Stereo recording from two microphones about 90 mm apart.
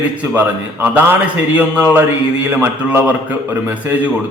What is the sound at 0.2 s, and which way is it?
Speech, 15° right (ahead or behind).